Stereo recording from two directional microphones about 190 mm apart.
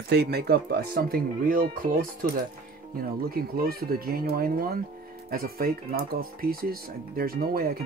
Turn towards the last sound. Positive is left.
turn(degrees=-50)  # may be behind; listen again after turning